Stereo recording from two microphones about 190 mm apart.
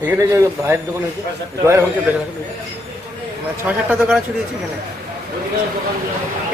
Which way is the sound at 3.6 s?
5° right (ahead or behind).